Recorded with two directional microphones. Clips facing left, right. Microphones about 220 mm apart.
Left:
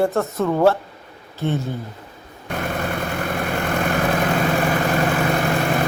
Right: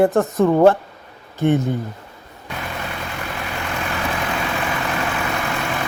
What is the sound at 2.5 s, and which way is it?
Vehicle, 50° left (ahead or behind).